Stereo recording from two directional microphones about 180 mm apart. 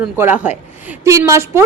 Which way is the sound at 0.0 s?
10° right (ahead or behind).